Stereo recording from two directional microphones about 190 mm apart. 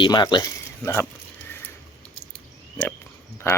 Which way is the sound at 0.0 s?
25° left (ahead or behind).